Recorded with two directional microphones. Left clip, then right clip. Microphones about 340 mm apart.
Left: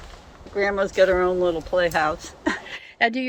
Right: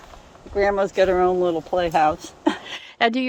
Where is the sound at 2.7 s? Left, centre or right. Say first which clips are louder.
Even; centre.